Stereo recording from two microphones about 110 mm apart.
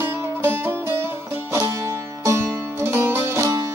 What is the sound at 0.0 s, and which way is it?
Music, 20° right (ahead or behind).